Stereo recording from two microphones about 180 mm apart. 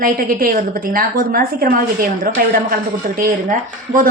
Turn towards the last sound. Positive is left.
turn(degrees=-45)  # may be behind; listen again after turning